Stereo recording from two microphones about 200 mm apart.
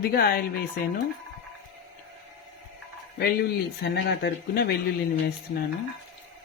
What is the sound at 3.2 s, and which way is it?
Speech, 50° left (ahead or behind).